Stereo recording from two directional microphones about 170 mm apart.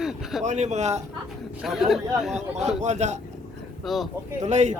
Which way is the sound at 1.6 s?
Centre (ahead or behind).